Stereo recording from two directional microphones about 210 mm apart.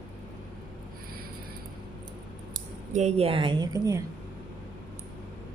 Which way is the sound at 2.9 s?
30° right (ahead or behind).